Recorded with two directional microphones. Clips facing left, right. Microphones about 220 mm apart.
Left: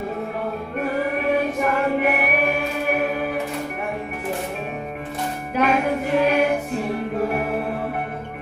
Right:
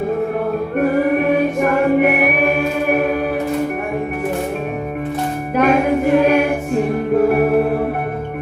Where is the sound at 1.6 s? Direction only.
55° right (ahead or behind).